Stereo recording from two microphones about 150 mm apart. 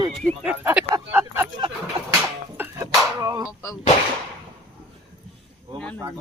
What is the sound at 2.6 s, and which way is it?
Music, 20° right (ahead or behind).